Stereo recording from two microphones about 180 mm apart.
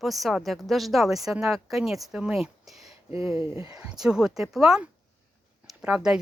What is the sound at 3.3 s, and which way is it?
Speech, 20° right (ahead or behind).